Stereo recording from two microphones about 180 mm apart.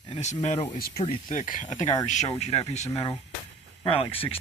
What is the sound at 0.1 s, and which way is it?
Speech, 40° left (ahead or behind).